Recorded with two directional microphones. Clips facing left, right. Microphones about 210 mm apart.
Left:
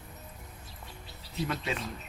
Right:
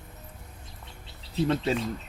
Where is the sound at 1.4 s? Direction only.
30° right (ahead or behind).